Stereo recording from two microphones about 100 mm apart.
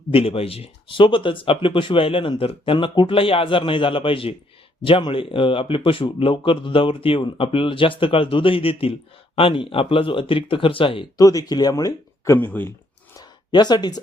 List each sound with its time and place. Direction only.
0.1 s speech: 70° left (ahead or behind)
11.2 s speech: 35° left (ahead or behind); by 12.7 s 20° left (ahead or behind)
13.1 s a sound: 45° left (ahead or behind)